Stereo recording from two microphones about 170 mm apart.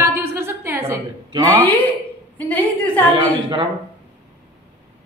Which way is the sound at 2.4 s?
10° left (ahead or behind).